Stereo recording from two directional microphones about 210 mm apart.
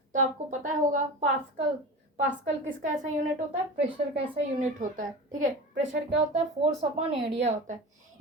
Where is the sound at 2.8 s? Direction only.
35° right (ahead or behind).